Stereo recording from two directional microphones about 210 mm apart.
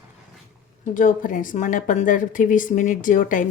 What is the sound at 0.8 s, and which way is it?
A woman's voice, 40° left (ahead or behind).